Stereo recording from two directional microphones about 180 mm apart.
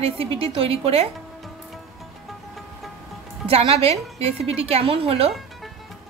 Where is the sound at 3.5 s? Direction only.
35° right (ahead or behind).